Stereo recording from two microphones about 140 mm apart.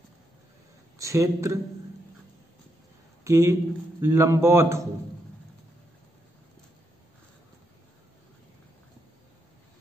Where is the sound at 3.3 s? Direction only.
20° right (ahead or behind).